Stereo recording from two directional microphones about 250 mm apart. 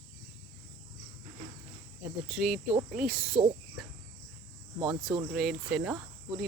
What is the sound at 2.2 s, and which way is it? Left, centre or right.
Cricket, centre.